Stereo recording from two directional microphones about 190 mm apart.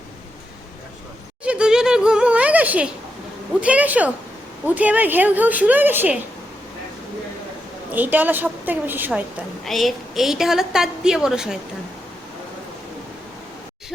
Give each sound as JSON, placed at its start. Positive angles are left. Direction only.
{"t": 1.5, "sound": "a sound", "side_deg": -5}
{"t": 3.6, "sound": "a woman's voice", "side_deg": -5}
{"t": 7.9, "sound": "a woman's voice", "side_deg": -10}